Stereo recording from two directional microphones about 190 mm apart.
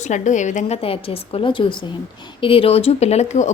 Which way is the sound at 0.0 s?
40° left (ahead or behind).